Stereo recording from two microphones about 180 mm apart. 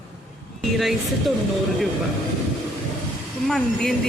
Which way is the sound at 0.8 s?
Centre (ahead or behind).